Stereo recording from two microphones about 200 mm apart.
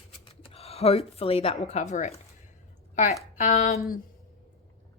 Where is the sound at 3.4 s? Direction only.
40° left (ahead or behind).